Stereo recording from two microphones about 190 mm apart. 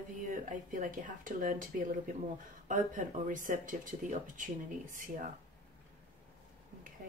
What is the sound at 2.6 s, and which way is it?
Speech, 45° right (ahead or behind).